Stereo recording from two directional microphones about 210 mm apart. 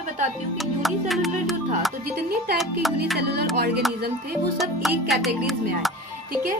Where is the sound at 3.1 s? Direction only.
50° right (ahead or behind).